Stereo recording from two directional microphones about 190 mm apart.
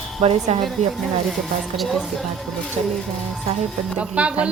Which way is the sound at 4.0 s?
5° right (ahead or behind).